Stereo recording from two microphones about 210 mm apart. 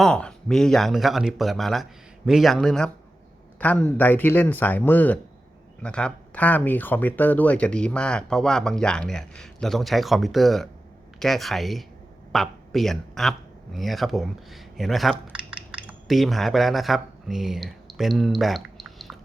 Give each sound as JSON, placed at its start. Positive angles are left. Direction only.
{"t": 0.0, "sound": "speech", "side_deg": 5}